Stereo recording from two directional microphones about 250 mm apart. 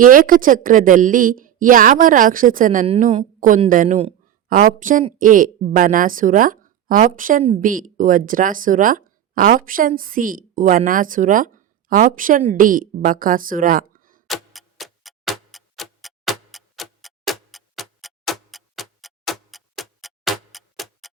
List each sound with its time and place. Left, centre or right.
0.0 s a woman's voice: right
14.3 s tick-tock: centre